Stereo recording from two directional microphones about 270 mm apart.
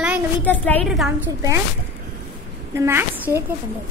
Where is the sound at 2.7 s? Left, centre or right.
Centre.